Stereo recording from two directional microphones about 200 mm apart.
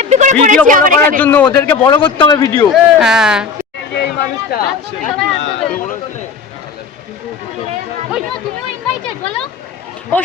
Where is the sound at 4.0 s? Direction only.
55° left (ahead or behind).